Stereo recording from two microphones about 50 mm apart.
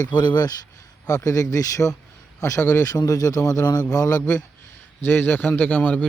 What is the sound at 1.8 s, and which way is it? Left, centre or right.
Speech, left.